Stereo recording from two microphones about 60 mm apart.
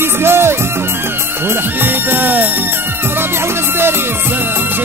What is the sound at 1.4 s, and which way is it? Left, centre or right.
Speech, right.